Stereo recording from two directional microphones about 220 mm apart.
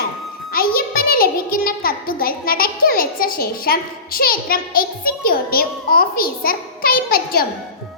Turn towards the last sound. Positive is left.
turn(degrees=40)  # may be behind; listen again after turning